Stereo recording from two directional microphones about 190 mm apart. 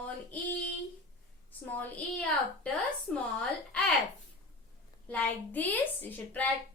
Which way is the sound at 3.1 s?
5° left (ahead or behind).